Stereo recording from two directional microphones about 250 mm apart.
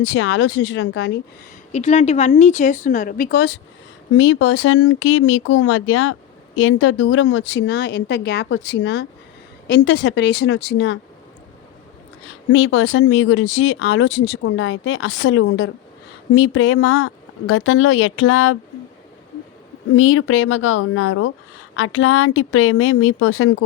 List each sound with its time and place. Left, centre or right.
0.0 s speech: left
1.7 s a woman's voice: left
12.2 s speech: left
20.0 s speech: left